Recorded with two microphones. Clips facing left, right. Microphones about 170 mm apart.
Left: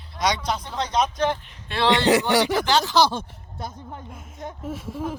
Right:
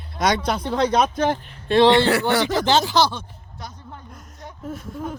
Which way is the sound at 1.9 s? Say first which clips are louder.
Right 2 dB; 20° left (ahead or behind).